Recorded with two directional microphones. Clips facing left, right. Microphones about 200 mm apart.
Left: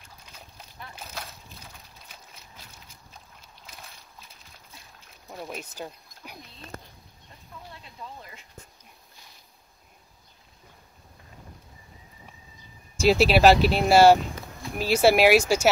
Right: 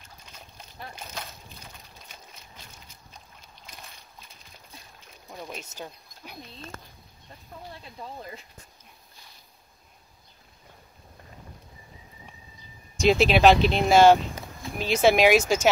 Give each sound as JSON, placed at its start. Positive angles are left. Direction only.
{"t": 0.9, "sound": "a sound", "side_deg": 5}
{"t": 5.3, "sound": "speech", "side_deg": 5}
{"t": 7.7, "sound": "speech", "side_deg": -35}
{"t": 12.9, "sound": "speech", "side_deg": 5}